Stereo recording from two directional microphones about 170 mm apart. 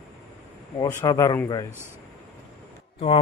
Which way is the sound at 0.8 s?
20° left (ahead or behind).